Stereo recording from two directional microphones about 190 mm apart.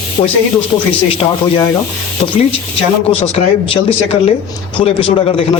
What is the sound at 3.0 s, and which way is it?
A man's voice, 30° left (ahead or behind).